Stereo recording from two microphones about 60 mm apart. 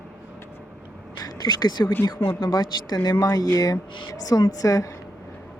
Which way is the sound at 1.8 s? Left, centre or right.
Left.